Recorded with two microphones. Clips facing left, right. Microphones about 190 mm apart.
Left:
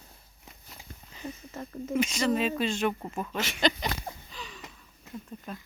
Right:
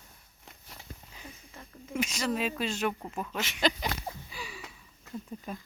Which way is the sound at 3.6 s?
10° right (ahead or behind).